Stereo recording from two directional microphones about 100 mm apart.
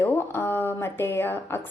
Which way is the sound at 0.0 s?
20° left (ahead or behind).